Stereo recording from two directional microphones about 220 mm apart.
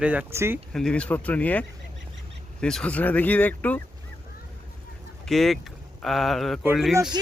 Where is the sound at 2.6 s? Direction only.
5° left (ahead or behind).